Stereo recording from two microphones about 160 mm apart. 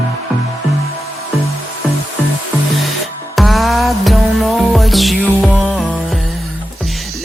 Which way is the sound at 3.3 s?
Centre (ahead or behind).